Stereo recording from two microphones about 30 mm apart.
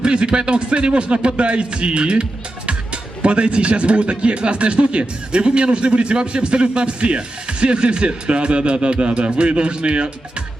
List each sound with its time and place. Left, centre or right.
0.0 s speech: right